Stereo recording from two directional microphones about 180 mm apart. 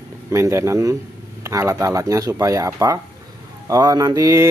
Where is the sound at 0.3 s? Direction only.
15° right (ahead or behind).